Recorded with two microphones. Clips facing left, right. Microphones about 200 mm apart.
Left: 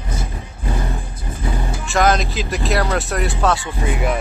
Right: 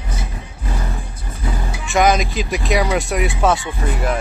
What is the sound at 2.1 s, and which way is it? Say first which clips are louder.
Speech: right 1 dB; centre (ahead or behind).